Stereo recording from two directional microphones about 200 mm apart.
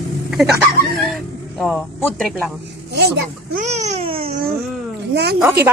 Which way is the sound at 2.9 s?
55° right (ahead or behind).